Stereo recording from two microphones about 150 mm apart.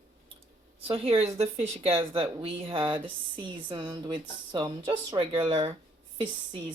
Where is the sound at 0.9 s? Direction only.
40° right (ahead or behind).